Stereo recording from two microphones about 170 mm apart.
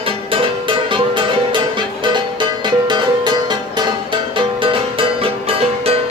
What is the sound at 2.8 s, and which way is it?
Music, 25° right (ahead or behind).